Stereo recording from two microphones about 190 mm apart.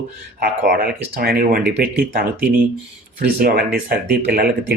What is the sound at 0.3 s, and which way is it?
Speech, 55° right (ahead or behind).